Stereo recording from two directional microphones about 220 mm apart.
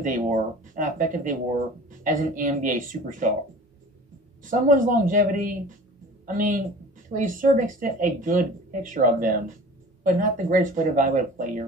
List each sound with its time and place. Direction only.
0.0 s speech: 35° right (ahead or behind)
4.4 s speech: 35° right (ahead or behind)